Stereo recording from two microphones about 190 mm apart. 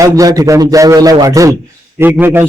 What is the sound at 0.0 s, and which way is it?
A man's voice, 20° right (ahead or behind).